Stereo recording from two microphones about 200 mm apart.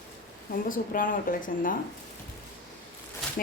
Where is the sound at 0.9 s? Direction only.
45° left (ahead or behind).